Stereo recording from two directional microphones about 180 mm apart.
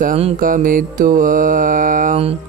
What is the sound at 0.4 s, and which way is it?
Mantra, 50° right (ahead or behind).